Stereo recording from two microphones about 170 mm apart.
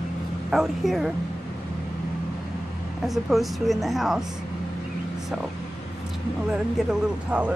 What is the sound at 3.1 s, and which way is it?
Speech, centre (ahead or behind).